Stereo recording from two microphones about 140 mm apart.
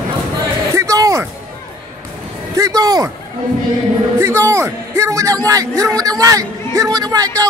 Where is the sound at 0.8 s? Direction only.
25° right (ahead or behind).